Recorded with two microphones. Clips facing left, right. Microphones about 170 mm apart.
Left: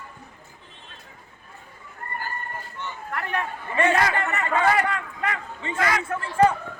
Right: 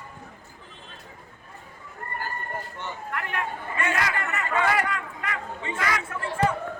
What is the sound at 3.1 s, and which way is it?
Chatter, 35° left (ahead or behind).